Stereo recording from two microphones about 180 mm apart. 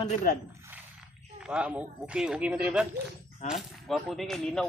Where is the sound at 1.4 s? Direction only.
5° right (ahead or behind).